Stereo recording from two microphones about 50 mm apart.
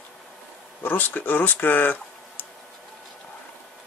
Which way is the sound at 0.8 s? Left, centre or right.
Left.